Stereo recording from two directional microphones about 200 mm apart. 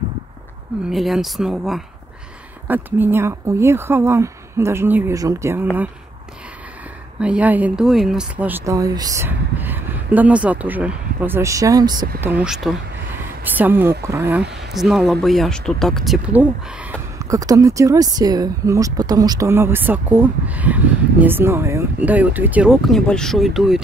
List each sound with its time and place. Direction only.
0.8 s speech: centre (ahead or behind)
7.2 s speech: 5° right (ahead or behind)
12.2 s speech: 10° right (ahead or behind)
14.4 s speech: 60° right (ahead or behind)
14.7 s speech: centre (ahead or behind)